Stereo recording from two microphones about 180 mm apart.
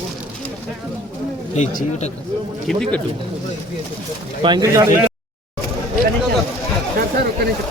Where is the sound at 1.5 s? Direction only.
45° left (ahead or behind).